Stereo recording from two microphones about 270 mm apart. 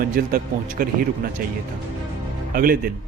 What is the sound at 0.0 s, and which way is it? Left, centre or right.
Speech, right.